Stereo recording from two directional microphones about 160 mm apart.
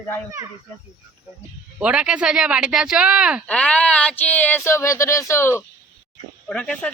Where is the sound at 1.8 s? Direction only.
5° right (ahead or behind).